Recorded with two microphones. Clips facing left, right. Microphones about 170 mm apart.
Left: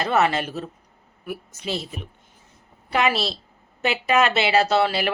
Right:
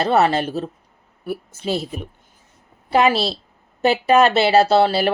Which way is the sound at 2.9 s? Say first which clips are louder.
Right 5 dB; 30° right (ahead or behind).